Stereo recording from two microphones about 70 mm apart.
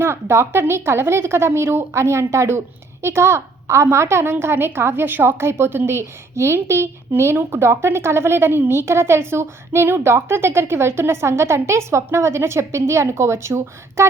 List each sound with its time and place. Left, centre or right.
0.0 s a woman's voice: right